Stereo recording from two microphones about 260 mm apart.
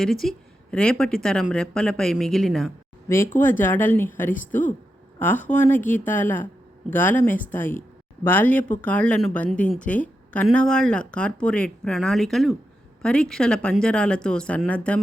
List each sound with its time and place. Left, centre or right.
0.0 s a woman's voice: centre